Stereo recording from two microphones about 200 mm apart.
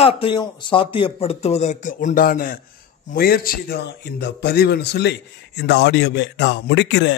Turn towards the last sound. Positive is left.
turn(degrees=60)  # may be behind; listen again after turning